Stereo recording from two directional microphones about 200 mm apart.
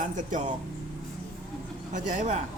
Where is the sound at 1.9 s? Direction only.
35° right (ahead or behind).